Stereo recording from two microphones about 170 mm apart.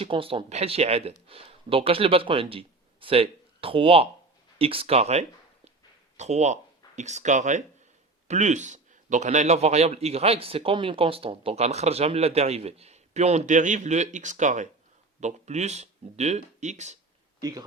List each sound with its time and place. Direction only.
0.0 s a man's voice: 35° right (ahead or behind)